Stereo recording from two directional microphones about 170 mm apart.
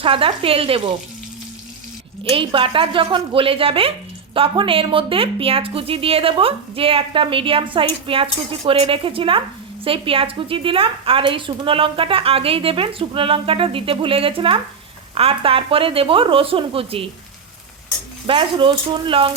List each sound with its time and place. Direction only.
0.0 s a woman's voice: 30° right (ahead or behind)
2.3 s a woman's voice: 30° right (ahead or behind)
18.3 s a woman's voice: 30° right (ahead or behind)